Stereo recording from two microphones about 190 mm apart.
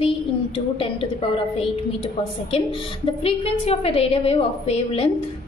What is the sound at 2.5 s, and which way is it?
A woman's voice, 30° left (ahead or behind).